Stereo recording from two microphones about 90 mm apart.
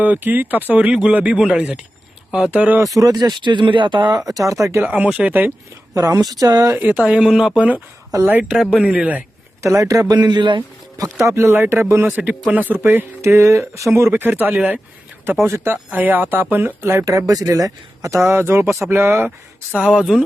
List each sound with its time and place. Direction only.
0.0 s speech: 20° right (ahead or behind)
2.8 s speech: 40° right (ahead or behind); by 4.2 s 60° right (ahead or behind)
4.4 s speech: 35° right (ahead or behind)
4.8 s speech: 20° right (ahead or behind)
5.9 s speech: 40° right (ahead or behind)
6.7 s speech: 20° right (ahead or behind)
9.6 s speech: 35° right (ahead or behind)
10.2 s speech: 55° right (ahead or behind)
11.3 s speech: 25° right (ahead or behind)
17.1 s speech: 40° right (ahead or behind)
19.7 s speech: 10° right (ahead or behind)